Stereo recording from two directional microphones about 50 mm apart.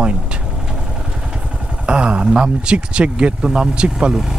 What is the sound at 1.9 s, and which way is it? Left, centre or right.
Speech, right.